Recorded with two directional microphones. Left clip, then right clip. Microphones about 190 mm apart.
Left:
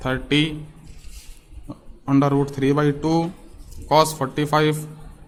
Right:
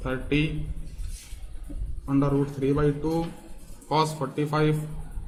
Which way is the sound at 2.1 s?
55° left (ahead or behind).